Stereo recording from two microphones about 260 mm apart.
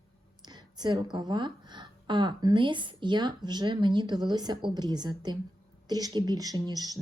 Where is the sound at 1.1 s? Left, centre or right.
Centre.